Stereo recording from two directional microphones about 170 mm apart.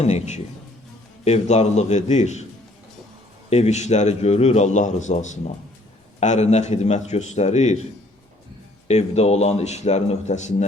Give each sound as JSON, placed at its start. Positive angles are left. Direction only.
{"t": 0.0, "sound": "a man's voice", "side_deg": 40}
{"t": 3.5, "sound": "a man's voice", "side_deg": 40}
{"t": 8.9, "sound": "a man's voice", "side_deg": 40}